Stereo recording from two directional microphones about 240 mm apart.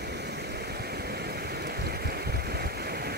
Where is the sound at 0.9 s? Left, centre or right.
Right.